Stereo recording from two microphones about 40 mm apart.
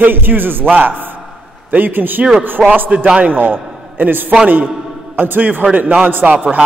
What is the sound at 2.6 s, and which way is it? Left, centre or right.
Speech, centre.